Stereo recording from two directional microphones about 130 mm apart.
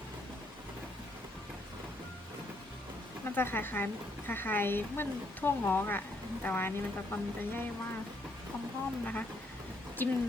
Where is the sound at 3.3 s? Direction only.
15° left (ahead or behind).